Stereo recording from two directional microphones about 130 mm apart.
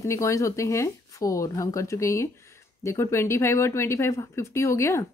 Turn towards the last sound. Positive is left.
turn(degrees=20)  # may be behind; listen again after turning